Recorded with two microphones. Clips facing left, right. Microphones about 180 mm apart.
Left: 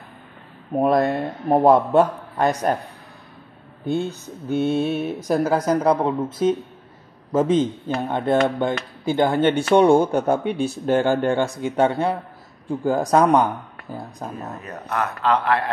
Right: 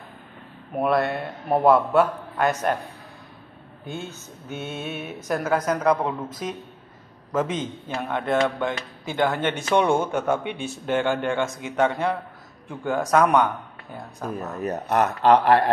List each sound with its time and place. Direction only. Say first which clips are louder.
0.7 s speech: left 4 dB; 40° left (ahead or behind)
3.8 s a man's voice: left 10 dB; 35° left (ahead or behind)
14.6 s speech: right 5 dB; 40° right (ahead or behind)